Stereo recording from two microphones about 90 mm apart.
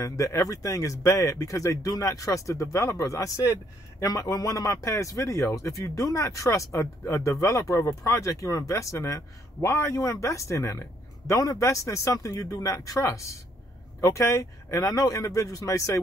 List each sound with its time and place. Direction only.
0.0 s speech: 35° left (ahead or behind)